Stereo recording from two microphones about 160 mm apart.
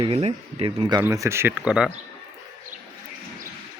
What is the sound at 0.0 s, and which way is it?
Speech, 35° right (ahead or behind).